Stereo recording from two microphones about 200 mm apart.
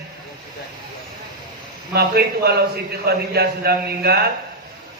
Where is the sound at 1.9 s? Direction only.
50° right (ahead or behind).